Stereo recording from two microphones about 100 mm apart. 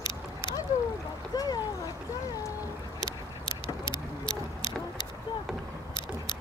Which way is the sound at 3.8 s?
50° left (ahead or behind).